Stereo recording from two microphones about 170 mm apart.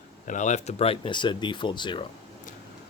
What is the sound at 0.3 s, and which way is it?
Speech, 45° left (ahead or behind).